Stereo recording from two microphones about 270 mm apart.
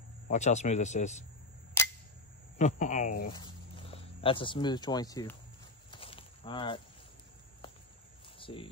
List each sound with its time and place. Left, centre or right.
0.3 s a man's voice: left
2.6 s a man's voice: left
3.3 s speech: centre
5.9 s snake: centre
8.4 s a sound: centre